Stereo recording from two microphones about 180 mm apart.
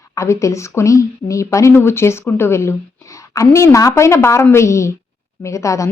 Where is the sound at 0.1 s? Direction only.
15° left (ahead or behind).